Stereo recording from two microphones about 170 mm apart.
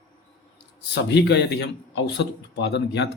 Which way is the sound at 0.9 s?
90° left.